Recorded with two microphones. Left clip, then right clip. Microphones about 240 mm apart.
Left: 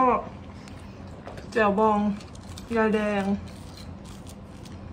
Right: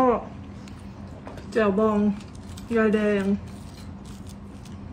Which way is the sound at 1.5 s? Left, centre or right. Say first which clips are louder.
Left 1 dB; centre.